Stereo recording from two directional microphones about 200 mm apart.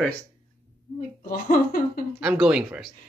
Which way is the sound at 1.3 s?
45° left (ahead or behind).